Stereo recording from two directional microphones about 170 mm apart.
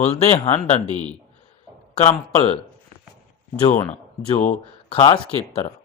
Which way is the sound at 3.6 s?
35° left (ahead or behind).